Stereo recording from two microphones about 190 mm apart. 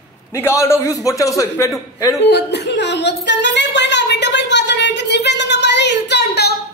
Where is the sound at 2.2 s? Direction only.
60° left (ahead or behind).